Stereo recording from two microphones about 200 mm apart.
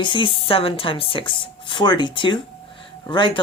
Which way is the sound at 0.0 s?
25° left (ahead or behind).